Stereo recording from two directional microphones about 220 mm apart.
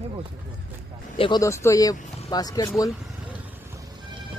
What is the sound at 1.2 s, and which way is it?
Speech, 15° left (ahead or behind).